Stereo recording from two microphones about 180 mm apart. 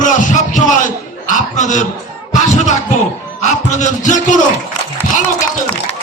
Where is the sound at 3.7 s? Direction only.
45° left (ahead or behind).